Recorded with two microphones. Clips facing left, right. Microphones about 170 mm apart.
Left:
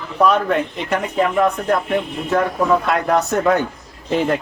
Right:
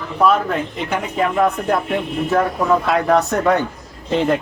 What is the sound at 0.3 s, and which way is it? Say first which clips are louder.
Speech: right 1 dB; centre (ahead or behind).